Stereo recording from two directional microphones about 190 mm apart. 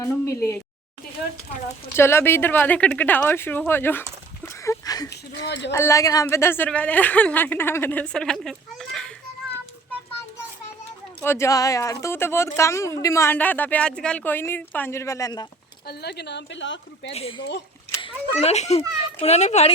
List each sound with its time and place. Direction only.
0.0 s a sound: 15° left (ahead or behind)
2.0 s speech: 15° left (ahead or behind)
4.4 s a sound: 15° left (ahead or behind)
5.7 s speech: 15° left (ahead or behind)
11.2 s speech: 15° left (ahead or behind)
15.9 s speech: 60° left (ahead or behind)
17.1 s a child's voice: 30° left (ahead or behind)